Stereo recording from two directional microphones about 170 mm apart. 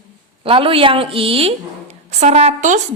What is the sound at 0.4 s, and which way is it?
A woman's voice, 35° right (ahead or behind).